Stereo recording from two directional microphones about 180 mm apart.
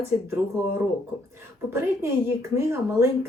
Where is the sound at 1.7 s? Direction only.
15° right (ahead or behind).